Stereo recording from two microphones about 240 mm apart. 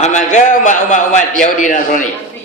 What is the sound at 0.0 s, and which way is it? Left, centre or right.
A man's voice, left.